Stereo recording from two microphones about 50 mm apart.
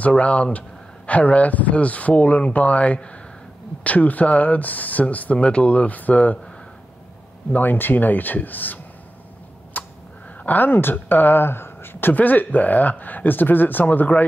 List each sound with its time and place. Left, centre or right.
0.2 s speech: left
7.5 s speech: left
9.8 s a sound: left
10.4 s speech: left